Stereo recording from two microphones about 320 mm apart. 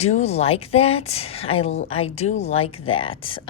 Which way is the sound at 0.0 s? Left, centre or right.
Centre.